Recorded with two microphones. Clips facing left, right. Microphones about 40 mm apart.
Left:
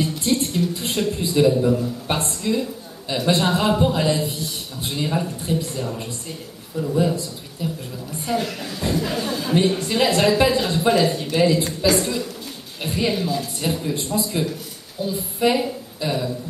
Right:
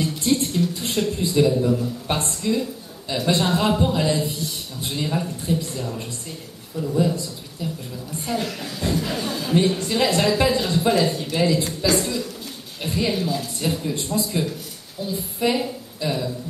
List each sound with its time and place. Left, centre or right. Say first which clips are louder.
0.4 s a man's voice: even; centre
5.8 s a woman's voice: left 2 dB; centre
8.3 s a woman's voice: left 2 dB; centre